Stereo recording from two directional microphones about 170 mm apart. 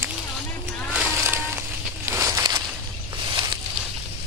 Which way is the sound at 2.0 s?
15° right (ahead or behind).